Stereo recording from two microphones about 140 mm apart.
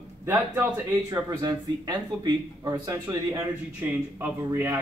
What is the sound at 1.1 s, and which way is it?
Speech, 30° right (ahead or behind).